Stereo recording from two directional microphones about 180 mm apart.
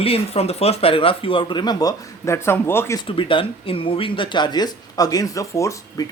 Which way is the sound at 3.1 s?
30° left (ahead or behind).